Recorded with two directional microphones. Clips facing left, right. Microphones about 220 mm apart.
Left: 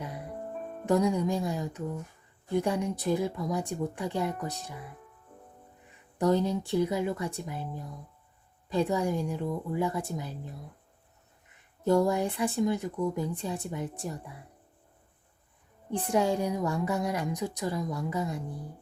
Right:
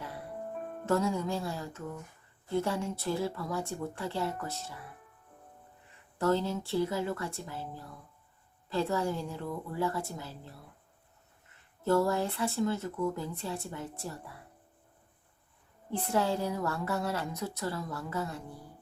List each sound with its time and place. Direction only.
0.0 s music: 20° left (ahead or behind)
0.9 s speech: 15° left (ahead or behind)
6.1 s speech: 15° left (ahead or behind)
15.9 s speech: 15° left (ahead or behind)